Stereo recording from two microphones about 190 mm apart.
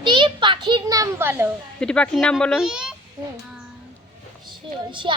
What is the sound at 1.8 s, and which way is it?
Speech, 5° left (ahead or behind).